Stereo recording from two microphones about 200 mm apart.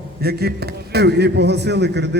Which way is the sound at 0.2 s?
50° right (ahead or behind).